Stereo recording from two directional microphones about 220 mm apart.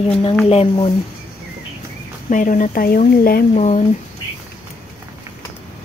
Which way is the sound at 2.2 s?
35° left (ahead or behind).